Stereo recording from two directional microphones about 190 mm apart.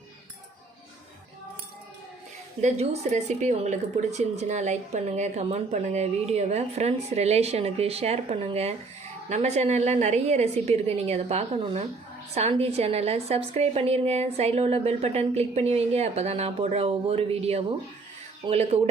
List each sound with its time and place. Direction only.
2.6 s a woman's voice: 35° right (ahead or behind)